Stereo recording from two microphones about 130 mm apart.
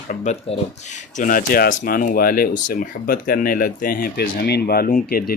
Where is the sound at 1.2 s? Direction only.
90° left.